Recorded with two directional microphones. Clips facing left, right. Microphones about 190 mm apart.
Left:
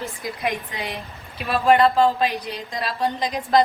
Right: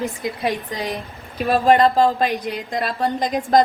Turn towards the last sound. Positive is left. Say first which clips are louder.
# right 3 dB
turn(degrees=-45)  # may be behind; listen again after turning